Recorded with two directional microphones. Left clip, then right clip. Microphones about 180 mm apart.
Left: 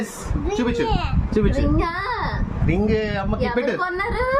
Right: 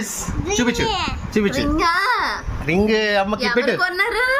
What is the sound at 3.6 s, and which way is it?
Speech, 15° left (ahead or behind).